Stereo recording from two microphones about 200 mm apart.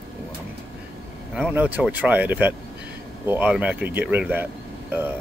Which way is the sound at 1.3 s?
5° right (ahead or behind).